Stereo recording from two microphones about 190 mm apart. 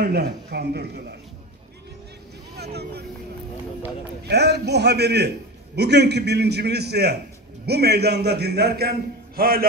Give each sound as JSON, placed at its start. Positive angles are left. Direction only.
{"t": 0.0, "sound": "a man's voice", "side_deg": -60}
{"t": 2.5, "sound": "speech", "side_deg": -60}
{"t": 4.3, "sound": "a man's voice", "side_deg": -60}